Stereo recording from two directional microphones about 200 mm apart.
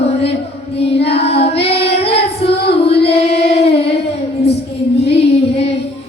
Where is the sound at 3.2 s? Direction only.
30° left (ahead or behind).